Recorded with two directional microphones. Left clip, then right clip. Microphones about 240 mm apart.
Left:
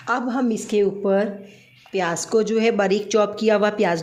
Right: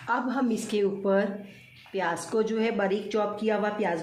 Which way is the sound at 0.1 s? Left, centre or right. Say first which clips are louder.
Left 5 dB; left.